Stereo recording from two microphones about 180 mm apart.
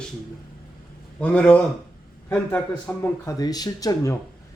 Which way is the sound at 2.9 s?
15° left (ahead or behind).